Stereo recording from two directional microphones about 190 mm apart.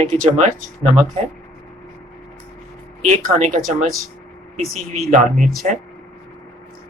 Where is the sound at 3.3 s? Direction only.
40° right (ahead or behind).